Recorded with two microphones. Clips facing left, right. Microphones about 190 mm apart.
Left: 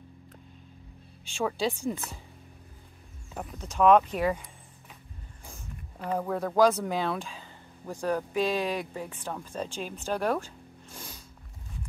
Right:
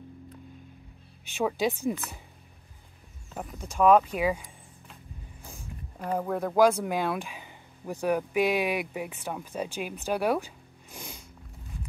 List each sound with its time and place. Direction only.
1.3 s speech: 20° right (ahead or behind)
3.3 s speech: 5° right (ahead or behind)
5.4 s a sound: 10° right (ahead or behind)
6.5 s speech: 10° right (ahead or behind)